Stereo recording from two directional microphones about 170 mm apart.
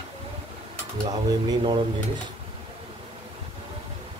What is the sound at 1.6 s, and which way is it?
Speech, 30° right (ahead or behind).